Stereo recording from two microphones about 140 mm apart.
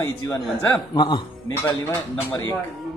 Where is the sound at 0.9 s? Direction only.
35° left (ahead or behind).